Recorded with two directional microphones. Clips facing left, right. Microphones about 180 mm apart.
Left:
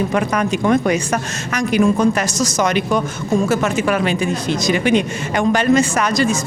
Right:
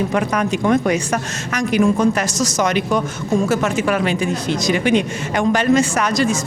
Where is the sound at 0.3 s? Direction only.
15° left (ahead or behind).